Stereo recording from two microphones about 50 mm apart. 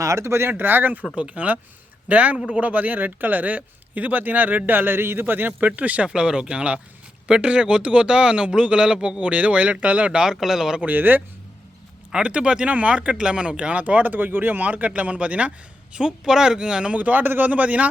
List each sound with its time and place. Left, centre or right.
0.0 s speech: right
0.5 s speech: right
1.1 s speech: right
10.1 s speech: centre
10.8 s speech: right
12.1 s speech: centre